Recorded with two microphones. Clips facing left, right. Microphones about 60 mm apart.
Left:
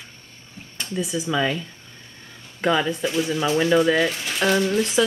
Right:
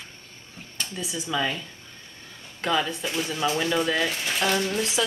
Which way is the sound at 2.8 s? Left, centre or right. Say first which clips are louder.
Left 6 dB; centre.